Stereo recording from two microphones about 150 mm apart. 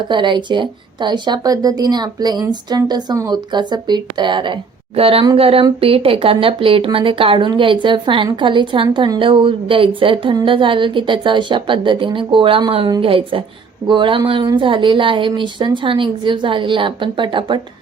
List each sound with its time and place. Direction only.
0.1 s speech: 30° right (ahead or behind)